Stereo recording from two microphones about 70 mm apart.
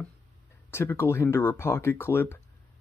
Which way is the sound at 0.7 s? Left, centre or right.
Left.